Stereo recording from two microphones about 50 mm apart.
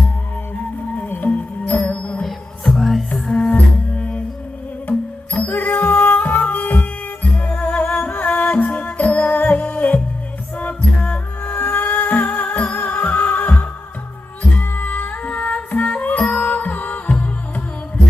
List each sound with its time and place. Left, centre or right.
1.0 s music: left
2.2 s music: centre
3.1 s music: centre
4.8 s music: left
11.6 s music: left